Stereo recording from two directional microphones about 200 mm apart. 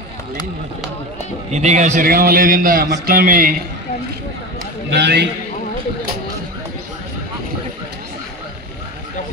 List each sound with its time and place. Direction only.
1.5 s a man's voice: 35° right (ahead or behind)
4.9 s a man's voice: 55° right (ahead or behind)